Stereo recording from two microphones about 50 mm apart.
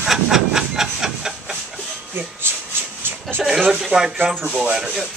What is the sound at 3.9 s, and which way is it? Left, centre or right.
Speech, centre.